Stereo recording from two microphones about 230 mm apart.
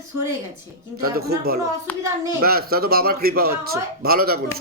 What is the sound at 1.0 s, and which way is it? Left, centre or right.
A man's voice, right.